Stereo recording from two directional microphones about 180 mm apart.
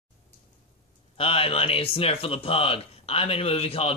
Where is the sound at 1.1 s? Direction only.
30° left (ahead or behind).